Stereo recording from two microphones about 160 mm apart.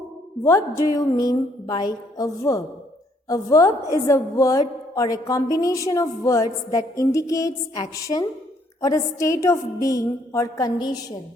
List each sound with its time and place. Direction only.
0.4 s a woman's voice: 20° left (ahead or behind)